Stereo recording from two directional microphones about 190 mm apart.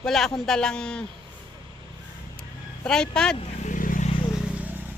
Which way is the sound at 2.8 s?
5° left (ahead or behind).